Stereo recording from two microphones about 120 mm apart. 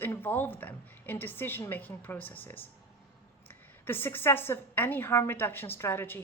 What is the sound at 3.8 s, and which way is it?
A woman's voice, 15° left (ahead or behind).